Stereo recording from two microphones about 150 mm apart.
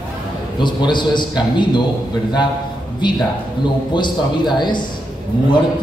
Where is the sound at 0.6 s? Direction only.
30° left (ahead or behind).